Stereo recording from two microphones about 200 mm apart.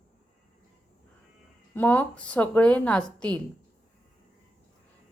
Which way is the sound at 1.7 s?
10° left (ahead or behind).